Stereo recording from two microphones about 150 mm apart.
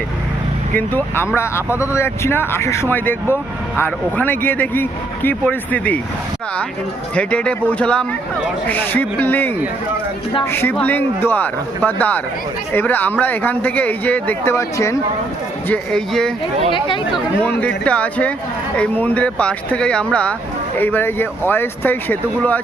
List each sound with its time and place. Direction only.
0.8 s speech: 15° left (ahead or behind)
7.2 s speech: 10° left (ahead or behind)
15.7 s speech: 5° left (ahead or behind)
16.7 s speech: 35° left (ahead or behind)
17.4 s speech: 10° left (ahead or behind)